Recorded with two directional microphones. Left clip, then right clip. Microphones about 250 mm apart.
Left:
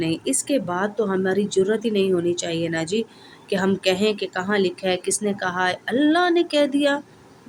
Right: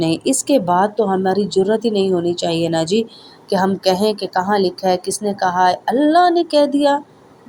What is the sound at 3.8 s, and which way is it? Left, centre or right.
Speech, centre.